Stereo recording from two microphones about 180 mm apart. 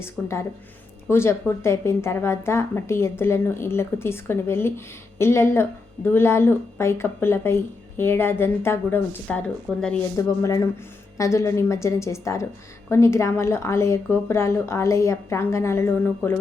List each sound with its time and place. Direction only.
0.0 s speech: 15° left (ahead or behind)
10.2 s speech: 20° left (ahead or behind)